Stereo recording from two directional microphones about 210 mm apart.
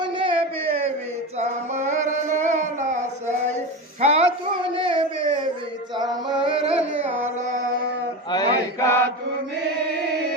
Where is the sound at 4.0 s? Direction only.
30° right (ahead or behind).